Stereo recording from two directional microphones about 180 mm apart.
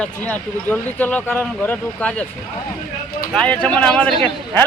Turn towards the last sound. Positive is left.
turn(degrees=5)  # may be behind; listen again after turning